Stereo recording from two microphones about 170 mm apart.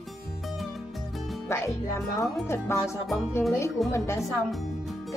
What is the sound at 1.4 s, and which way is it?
Speech, 15° left (ahead or behind).